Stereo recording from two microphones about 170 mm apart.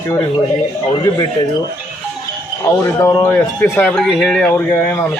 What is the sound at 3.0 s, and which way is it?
Speech, 20° left (ahead or behind).